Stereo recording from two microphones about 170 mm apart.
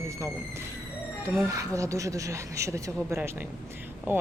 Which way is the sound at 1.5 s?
20° right (ahead or behind).